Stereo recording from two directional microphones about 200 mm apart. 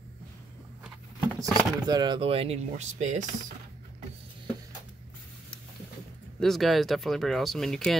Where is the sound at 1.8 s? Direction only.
20° right (ahead or behind); by 3.3 s 35° right (ahead or behind).